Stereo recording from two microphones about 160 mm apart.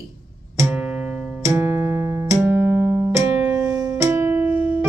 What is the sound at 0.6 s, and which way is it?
Music, 5° right (ahead or behind).